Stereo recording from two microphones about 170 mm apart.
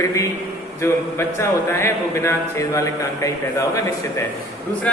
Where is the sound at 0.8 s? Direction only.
15° left (ahead or behind).